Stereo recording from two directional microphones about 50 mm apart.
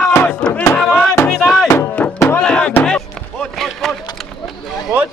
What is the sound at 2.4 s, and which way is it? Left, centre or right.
Music, left.